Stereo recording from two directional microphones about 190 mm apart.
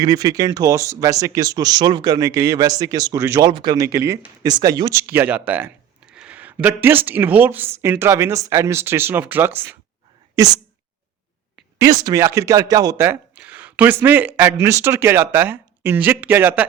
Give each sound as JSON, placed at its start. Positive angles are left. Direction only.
{"t": 0.0, "sound": "speech", "side_deg": -20}
{"t": 11.8, "sound": "speech", "side_deg": -20}